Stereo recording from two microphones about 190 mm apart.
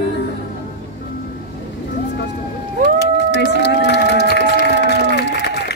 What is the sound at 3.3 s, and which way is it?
Run, 65° left (ahead or behind).